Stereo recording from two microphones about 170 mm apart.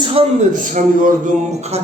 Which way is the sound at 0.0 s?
35° right (ahead or behind).